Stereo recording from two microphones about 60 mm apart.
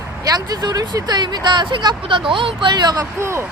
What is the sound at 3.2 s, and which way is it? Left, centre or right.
Speech, right.